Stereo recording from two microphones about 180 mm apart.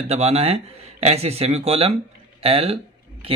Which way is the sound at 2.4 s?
35° right (ahead or behind).